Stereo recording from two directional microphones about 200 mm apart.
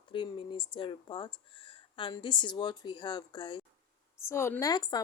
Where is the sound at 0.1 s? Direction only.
25° left (ahead or behind).